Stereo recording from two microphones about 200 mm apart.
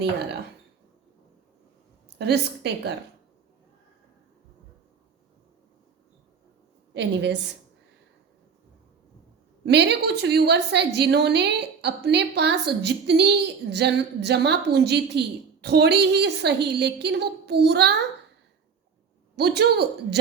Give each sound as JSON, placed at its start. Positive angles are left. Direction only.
{"t": 2.1, "sound": "a woman's voice", "side_deg": -55}
{"t": 6.9, "sound": "a woman's voice", "side_deg": -60}
{"t": 9.6, "sound": "a woman's voice", "side_deg": -55}
{"t": 19.4, "sound": "a woman's voice", "side_deg": -55}